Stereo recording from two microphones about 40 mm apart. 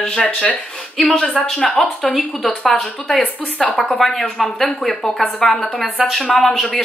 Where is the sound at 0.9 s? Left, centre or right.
Centre.